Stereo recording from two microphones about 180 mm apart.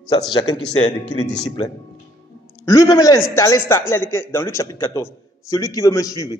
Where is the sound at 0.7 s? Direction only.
40° left (ahead or behind).